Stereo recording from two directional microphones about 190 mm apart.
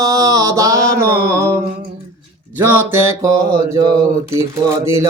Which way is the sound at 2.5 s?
10° right (ahead or behind).